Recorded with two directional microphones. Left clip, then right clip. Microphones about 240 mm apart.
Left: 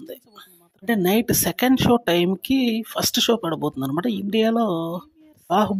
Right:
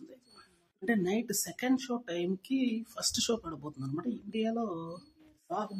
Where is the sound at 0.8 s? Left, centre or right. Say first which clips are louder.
Left 11 dB; left.